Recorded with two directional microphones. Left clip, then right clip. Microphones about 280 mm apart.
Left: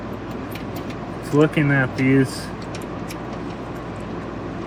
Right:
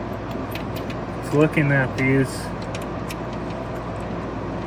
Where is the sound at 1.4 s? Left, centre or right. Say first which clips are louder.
Left 1 dB; centre.